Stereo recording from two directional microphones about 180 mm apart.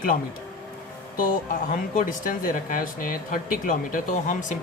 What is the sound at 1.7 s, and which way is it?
Speech, 50° left (ahead or behind).